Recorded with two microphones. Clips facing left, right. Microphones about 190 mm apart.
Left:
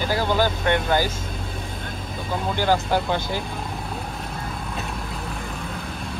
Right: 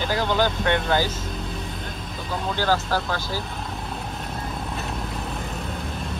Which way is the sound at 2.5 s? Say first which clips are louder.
Left 2 dB; 15° left (ahead or behind).